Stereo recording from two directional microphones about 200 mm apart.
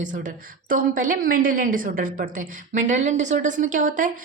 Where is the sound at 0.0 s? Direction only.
40° right (ahead or behind).